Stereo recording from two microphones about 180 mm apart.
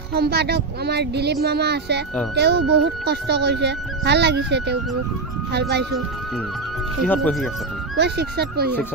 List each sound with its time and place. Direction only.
0.1 s speech: 65° right (ahead or behind)
7.1 s speech: 5° left (ahead or behind)
8.0 s speech: 65° right (ahead or behind)